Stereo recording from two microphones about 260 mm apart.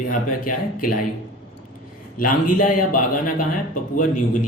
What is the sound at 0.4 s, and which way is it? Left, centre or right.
Speech, left.